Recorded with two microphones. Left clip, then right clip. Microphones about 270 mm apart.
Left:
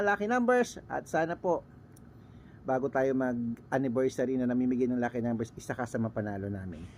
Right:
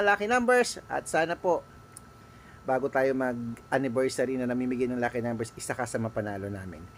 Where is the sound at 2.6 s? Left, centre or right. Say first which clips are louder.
Right 3 dB; centre.